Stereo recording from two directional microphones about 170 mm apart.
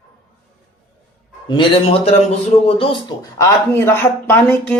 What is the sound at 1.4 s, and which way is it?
A man's voice, 30° left (ahead or behind).